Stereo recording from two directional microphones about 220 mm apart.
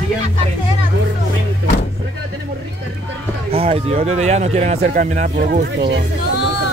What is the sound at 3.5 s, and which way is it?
Speech, 25° right (ahead or behind).